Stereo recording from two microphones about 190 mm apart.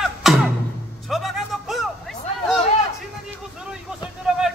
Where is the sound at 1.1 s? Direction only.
Centre (ahead or behind).